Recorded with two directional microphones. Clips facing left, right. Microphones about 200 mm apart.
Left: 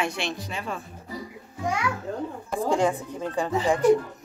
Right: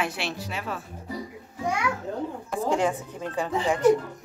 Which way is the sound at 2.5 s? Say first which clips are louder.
Left 2 dB; 5° right (ahead or behind).